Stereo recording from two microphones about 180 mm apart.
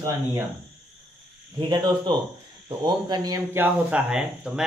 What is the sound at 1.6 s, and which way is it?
Speech, 25° right (ahead or behind).